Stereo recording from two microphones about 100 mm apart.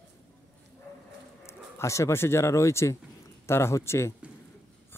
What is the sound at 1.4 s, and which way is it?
A man's voice, 30° left (ahead or behind).